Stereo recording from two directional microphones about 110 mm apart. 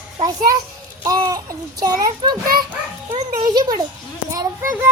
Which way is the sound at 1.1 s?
35° right (ahead or behind).